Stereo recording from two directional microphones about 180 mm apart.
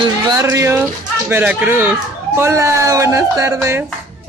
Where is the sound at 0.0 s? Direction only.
20° right (ahead or behind).